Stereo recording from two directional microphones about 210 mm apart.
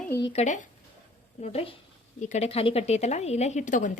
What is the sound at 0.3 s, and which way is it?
A woman's voice, 35° left (ahead or behind).